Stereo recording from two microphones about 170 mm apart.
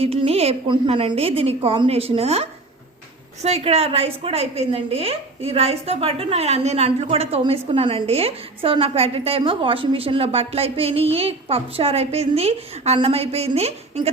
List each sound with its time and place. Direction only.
0.0 s a woman's voice: 35° right (ahead or behind)